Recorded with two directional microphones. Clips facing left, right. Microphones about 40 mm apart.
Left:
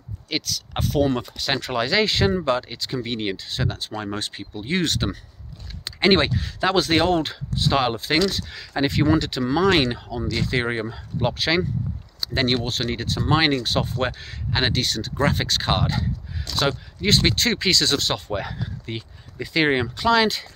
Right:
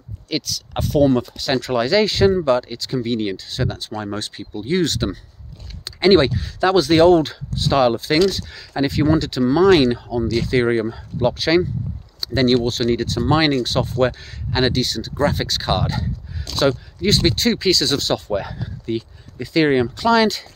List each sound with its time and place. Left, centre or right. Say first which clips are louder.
0.3 s speech: right 3 dB; left
9.4 s speech: right 6 dB; centre
10.0 s speech: right 7 dB; left
10.5 s speech: right 8 dB; centre
14.7 s speech: right 3 dB; left
15.8 s speech: right 1 dB; centre
17.4 s speech: right 3 dB; left